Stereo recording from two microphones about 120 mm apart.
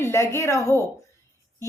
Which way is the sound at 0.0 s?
25° left (ahead or behind).